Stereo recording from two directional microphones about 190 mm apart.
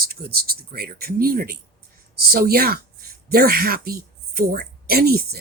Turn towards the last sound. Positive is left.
turn(degrees=-55)  # may be behind; listen again after turning